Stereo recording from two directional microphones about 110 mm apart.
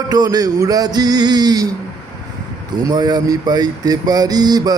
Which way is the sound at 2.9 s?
40° right (ahead or behind).